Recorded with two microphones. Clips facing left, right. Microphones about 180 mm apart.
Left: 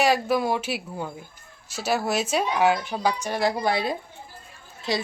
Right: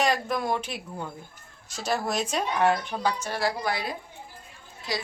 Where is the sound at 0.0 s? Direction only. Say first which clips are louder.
Left 4 dB; 5° left (ahead or behind).